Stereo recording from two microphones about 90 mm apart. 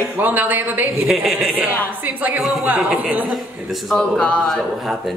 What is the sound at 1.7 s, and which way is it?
Speech, 20° left (ahead or behind).